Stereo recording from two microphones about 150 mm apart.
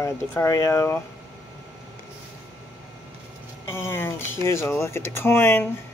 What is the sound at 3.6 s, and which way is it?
Speech, 15° left (ahead or behind).